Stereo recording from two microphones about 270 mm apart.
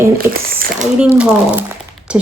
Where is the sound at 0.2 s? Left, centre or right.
Right.